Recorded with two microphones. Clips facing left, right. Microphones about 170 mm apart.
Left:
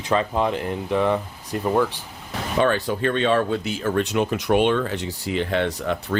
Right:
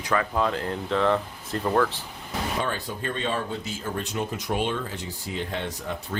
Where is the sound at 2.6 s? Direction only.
80° left.